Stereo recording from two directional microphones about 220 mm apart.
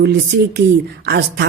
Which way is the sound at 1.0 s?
50° right (ahead or behind).